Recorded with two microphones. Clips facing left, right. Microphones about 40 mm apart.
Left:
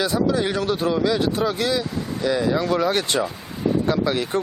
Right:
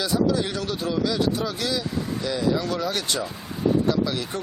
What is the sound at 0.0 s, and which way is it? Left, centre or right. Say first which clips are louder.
Speech: left 2 dB; left.